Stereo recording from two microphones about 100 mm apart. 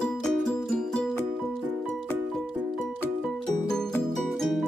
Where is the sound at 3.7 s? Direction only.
5° left (ahead or behind).